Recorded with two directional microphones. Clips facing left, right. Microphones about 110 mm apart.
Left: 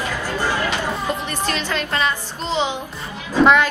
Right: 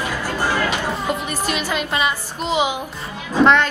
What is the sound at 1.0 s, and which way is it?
A woman's voice, 10° right (ahead or behind).